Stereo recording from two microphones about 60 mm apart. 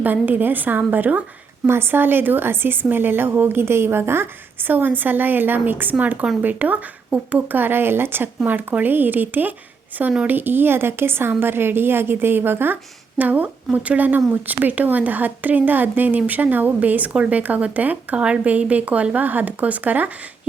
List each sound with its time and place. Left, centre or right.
0.0 s speech: right
1.6 s speech: right